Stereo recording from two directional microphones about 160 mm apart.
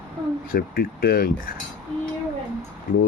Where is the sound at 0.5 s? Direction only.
65° left (ahead or behind).